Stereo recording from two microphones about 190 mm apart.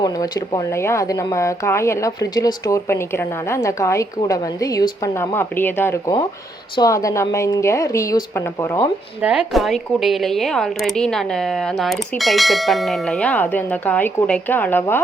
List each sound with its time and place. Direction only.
0.0 s speech: 20° left (ahead or behind)
9.2 s speech: 5° right (ahead or behind); by 15.0 s 10° left (ahead or behind)